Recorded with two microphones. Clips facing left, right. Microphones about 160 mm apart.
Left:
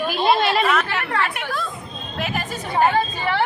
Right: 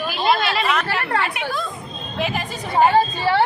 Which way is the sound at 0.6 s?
Centre (ahead or behind).